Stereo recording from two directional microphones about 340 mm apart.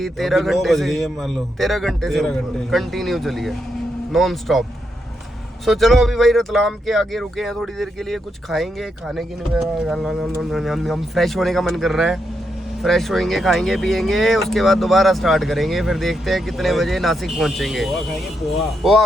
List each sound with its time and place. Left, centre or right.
0.0 s speech: centre
5.6 s speech: centre